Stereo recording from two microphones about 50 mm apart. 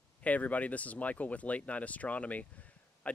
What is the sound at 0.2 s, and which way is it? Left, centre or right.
Speech, left.